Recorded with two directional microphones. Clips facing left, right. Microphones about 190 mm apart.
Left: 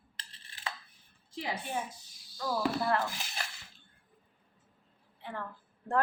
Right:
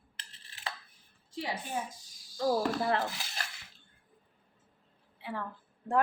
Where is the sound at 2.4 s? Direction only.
45° right (ahead or behind).